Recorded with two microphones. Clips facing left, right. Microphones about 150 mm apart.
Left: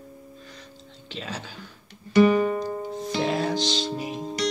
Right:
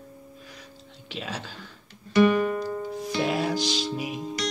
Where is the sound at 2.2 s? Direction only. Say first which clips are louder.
Left 2 dB; 30° left (ahead or behind).